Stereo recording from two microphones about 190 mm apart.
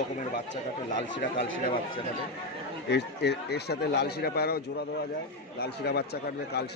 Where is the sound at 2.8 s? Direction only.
60° left (ahead or behind).